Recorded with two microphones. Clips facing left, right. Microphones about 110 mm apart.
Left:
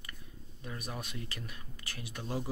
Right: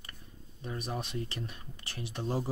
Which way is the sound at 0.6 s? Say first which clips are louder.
Right 5 dB; 30° right (ahead or behind).